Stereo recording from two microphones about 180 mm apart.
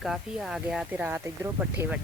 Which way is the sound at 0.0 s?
Centre (ahead or behind).